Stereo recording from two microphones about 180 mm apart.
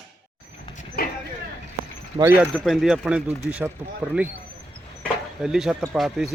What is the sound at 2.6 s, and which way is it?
A woman's voice, centre (ahead or behind).